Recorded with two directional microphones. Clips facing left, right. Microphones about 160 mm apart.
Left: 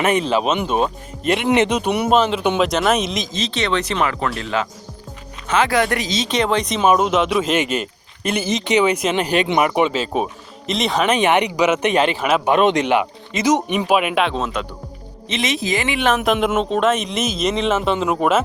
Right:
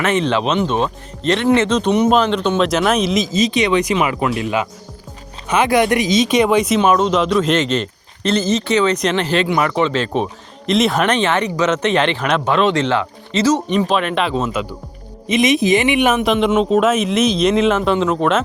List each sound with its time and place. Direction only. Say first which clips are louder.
0.0 s speech: right 1 dB; 15° left (ahead or behind)
11.1 s speech: left 1 dB; 15° left (ahead or behind)
14.3 s speech: right 3 dB; 5° right (ahead or behind)
15.3 s speech: right 8 dB; 15° right (ahead or behind)
16.1 s speech: right 3 dB; centre (ahead or behind)